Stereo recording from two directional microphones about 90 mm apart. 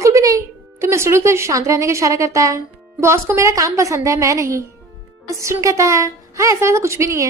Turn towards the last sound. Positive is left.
turn(degrees=-35)  # may be behind; listen again after turning